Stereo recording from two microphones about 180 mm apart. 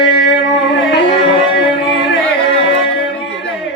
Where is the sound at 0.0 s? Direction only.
70° left (ahead or behind).